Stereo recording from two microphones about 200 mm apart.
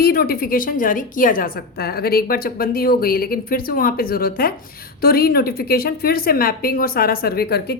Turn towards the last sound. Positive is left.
turn(degrees=50)  # may be behind; listen again after turning